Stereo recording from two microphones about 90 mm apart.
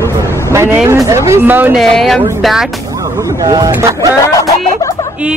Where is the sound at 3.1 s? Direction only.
45° right (ahead or behind).